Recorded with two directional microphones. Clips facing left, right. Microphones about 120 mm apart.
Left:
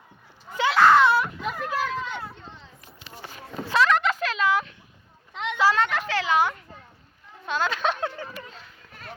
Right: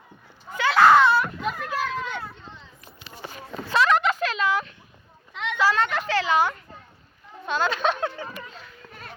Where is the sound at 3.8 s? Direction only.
10° right (ahead or behind).